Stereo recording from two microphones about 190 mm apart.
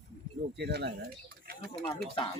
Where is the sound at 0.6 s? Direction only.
60° right (ahead or behind).